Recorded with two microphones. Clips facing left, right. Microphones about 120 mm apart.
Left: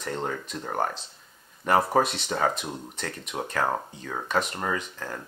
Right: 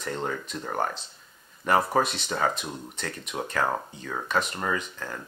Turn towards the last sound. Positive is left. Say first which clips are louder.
# even
turn(degrees=35)  # may be behind; listen again after turning